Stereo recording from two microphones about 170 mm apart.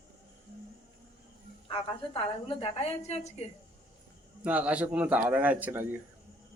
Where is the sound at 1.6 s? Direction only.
30° left (ahead or behind).